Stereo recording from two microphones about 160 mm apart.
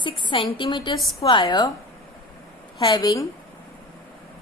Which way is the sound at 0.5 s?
30° left (ahead or behind).